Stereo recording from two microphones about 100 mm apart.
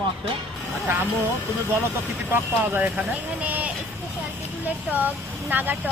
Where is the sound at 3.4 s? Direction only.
15° right (ahead or behind).